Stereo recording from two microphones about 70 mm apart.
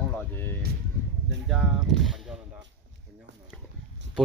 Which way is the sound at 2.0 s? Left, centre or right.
Centre.